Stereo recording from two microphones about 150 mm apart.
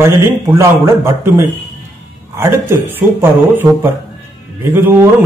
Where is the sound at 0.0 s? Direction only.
15° right (ahead or behind).